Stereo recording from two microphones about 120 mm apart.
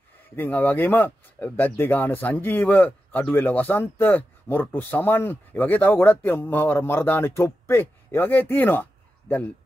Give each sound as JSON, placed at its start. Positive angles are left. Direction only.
{"t": 0.4, "sound": "speech", "side_deg": 15}